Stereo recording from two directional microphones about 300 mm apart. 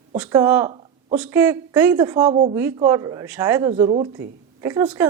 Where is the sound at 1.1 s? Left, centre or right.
Centre.